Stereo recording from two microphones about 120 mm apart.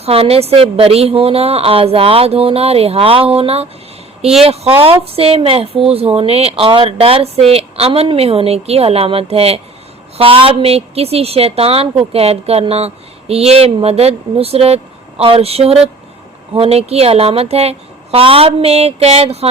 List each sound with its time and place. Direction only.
0.0 s speech: 55° right (ahead or behind)